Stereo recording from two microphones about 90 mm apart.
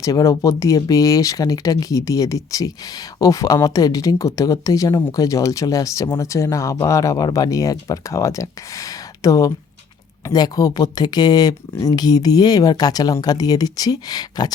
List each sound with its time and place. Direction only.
0.0 s speech: 40° left (ahead or behind)